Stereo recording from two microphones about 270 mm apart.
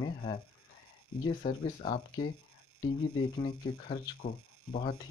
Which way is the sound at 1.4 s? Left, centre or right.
Left.